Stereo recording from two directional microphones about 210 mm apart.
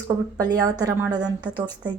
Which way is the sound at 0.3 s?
15° right (ahead or behind).